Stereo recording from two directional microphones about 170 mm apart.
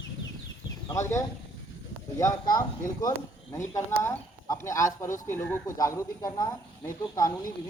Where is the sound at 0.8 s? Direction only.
15° left (ahead or behind).